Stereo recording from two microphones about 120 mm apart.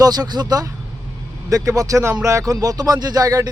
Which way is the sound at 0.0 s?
35° right (ahead or behind).